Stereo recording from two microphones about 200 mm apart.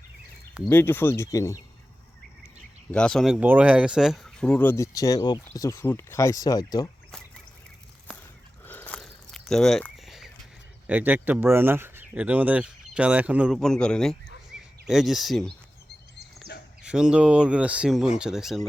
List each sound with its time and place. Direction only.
0.7 s speech: 10° left (ahead or behind)
2.9 s speech: 5° left (ahead or behind); by 6.9 s 20° left (ahead or behind)
8.6 s a sound: 10° left (ahead or behind)
10.8 s speech: 10° right (ahead or behind)
14.5 s a sound: 5° right (ahead or behind)
14.8 s speech: centre (ahead or behind)
16.8 s speech: 5° right (ahead or behind)